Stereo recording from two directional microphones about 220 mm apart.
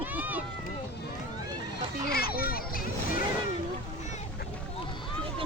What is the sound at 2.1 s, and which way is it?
Children playing, 45° left (ahead or behind).